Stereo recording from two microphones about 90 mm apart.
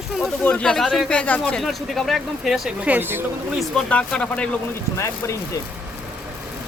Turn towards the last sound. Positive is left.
turn(degrees=35)  # may be behind; listen again after turning